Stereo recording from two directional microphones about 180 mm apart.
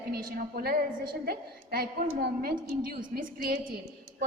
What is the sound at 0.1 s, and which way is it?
A woman's voice, 55° right (ahead or behind).